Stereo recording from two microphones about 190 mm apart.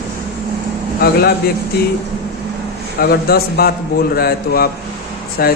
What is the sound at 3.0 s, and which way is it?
Speech, 55° left (ahead or behind).